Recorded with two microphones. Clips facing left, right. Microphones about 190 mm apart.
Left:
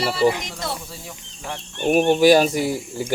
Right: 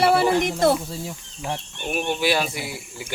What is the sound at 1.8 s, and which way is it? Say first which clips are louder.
Speech: left 10 dB; 45° left (ahead or behind).